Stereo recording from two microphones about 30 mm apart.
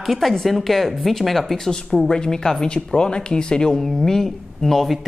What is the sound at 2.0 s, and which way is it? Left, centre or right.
Speech, left.